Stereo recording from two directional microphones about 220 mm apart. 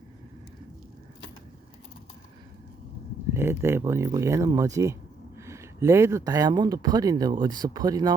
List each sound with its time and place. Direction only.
3.3 s speech: 10° right (ahead or behind)